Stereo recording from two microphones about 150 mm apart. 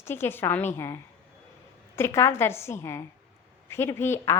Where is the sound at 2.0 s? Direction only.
20° left (ahead or behind).